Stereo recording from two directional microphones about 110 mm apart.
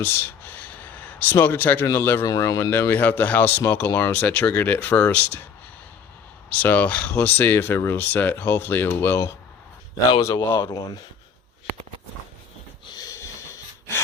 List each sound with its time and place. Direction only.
0.0 s a sound: 15° left (ahead or behind)
2.0 s speech: 20° left (ahead or behind)
2.2 s speech: 35° left (ahead or behind); by 5.4 s 15° left (ahead or behind)
6.5 s speech: 15° left (ahead or behind)
10.6 s speech: 35° left (ahead or behind)
12.9 s snort: 35° left (ahead or behind)